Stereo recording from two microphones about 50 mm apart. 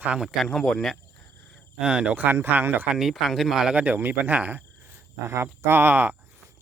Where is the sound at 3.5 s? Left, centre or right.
Centre.